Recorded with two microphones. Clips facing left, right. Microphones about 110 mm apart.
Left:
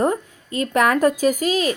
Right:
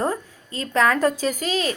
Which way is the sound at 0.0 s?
20° left (ahead or behind).